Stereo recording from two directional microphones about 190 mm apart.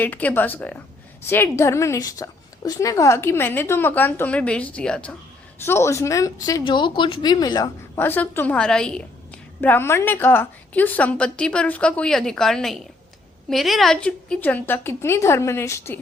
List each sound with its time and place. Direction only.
0.0 s a woman's voice: 10° left (ahead or behind)